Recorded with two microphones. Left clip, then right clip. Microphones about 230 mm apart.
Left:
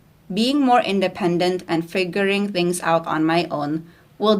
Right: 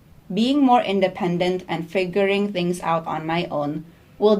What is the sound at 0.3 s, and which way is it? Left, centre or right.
Speech, left.